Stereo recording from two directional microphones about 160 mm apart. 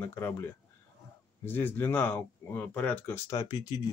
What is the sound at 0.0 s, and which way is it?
Speech, 15° left (ahead or behind).